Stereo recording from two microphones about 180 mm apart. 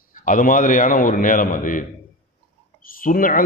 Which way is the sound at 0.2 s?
45° left (ahead or behind).